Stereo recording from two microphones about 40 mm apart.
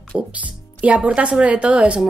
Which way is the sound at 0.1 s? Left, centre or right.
Right.